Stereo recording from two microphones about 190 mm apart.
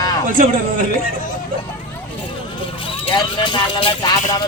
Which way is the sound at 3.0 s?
25° left (ahead or behind).